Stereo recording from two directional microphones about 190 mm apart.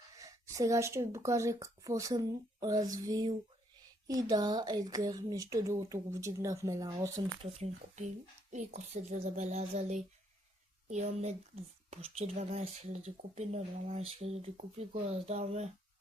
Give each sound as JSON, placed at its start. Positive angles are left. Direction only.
{"t": 0.2, "sound": "speech", "side_deg": -15}
{"t": 7.6, "sound": "speech", "side_deg": -40}